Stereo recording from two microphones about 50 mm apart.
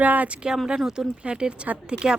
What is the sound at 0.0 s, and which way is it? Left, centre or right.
Speech, right.